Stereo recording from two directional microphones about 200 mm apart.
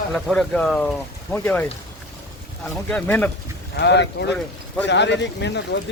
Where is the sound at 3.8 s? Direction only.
60° left (ahead or behind).